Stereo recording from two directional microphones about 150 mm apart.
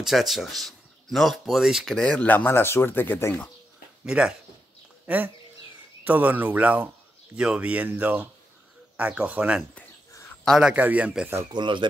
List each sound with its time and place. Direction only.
0.0 s speech: centre (ahead or behind); by 3.4 s 15° left (ahead or behind)
4.0 s speech: 5° right (ahead or behind)
11.5 s speech: 30° right (ahead or behind)